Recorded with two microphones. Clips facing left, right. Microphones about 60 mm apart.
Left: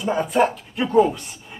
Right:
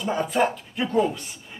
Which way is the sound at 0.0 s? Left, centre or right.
Centre.